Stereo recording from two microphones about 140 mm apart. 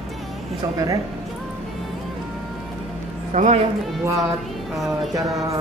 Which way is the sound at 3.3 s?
55° right (ahead or behind).